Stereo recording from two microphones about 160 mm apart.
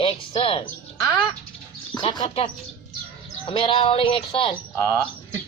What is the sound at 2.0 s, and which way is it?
Speech, 30° left (ahead or behind).